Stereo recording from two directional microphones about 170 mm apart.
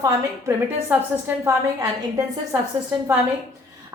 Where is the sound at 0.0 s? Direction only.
20° right (ahead or behind).